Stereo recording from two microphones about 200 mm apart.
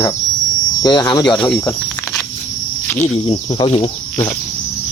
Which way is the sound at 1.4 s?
5° left (ahead or behind).